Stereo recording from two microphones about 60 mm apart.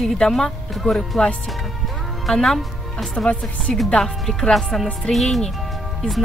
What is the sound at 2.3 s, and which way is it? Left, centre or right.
Speech, centre.